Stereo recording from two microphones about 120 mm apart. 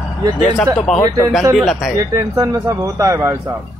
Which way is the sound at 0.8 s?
5° left (ahead or behind).